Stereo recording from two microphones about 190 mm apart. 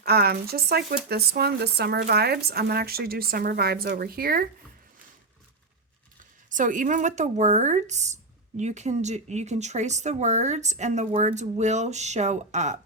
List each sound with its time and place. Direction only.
0.0 s speech: 55° right (ahead or behind)
6.5 s speech: 45° right (ahead or behind)